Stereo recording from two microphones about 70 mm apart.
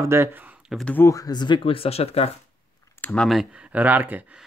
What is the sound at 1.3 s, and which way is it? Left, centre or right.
Speech, left.